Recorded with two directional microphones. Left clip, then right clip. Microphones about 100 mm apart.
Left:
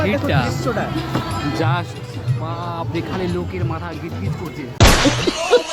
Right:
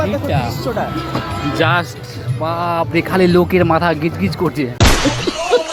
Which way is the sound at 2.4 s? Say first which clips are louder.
Right 10 dB; 55° right (ahead or behind).